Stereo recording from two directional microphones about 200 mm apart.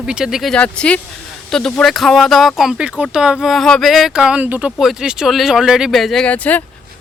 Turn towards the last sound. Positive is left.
turn(degrees=10)  # may be behind; listen again after turning